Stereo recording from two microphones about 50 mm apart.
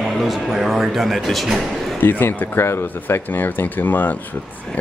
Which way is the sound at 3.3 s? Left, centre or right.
Left.